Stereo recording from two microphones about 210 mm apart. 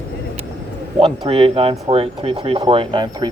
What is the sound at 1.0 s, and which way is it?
Speech, 25° right (ahead or behind).